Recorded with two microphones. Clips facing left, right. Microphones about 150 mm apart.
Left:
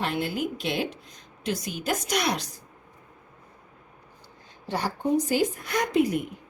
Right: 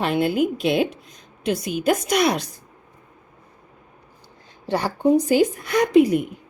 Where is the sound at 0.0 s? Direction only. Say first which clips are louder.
Right 8 dB; 65° right (ahead or behind).